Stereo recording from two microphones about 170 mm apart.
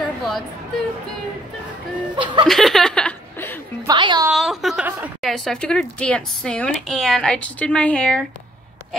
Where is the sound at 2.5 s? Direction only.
Centre (ahead or behind).